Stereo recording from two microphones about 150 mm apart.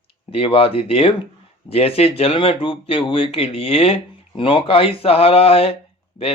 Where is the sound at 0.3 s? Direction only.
40° left (ahead or behind).